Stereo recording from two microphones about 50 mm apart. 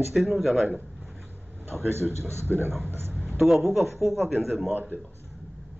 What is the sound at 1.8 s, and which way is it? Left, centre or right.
Speech, right.